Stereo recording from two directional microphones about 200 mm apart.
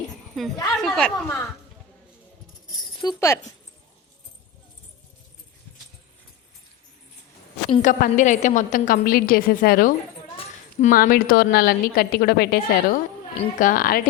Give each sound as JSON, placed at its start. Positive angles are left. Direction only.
{"t": 0.4, "sound": "a woman's voice", "side_deg": 0}
{"t": 3.0, "sound": "speech", "side_deg": 20}
{"t": 7.7, "sound": "a woman's voice", "side_deg": 40}
{"t": 10.3, "sound": "a woman's voice", "side_deg": 35}